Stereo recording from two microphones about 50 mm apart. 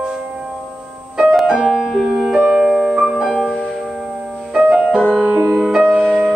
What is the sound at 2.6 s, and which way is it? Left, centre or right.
Piano, centre.